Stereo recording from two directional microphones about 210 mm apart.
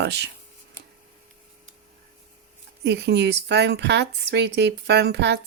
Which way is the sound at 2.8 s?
55° right (ahead or behind).